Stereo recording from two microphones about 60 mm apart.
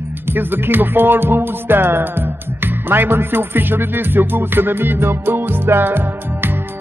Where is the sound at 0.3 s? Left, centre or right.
Right.